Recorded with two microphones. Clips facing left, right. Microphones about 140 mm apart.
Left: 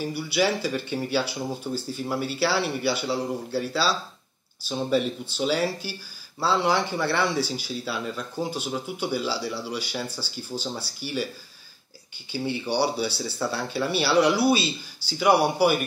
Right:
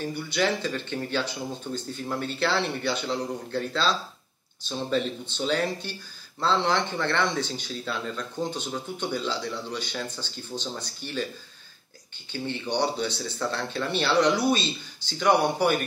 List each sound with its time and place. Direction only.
0.0 s speech: 10° left (ahead or behind)
12.3 s speech: 10° left (ahead or behind)